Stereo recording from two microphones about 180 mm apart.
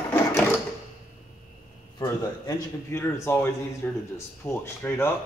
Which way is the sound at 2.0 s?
15° left (ahead or behind).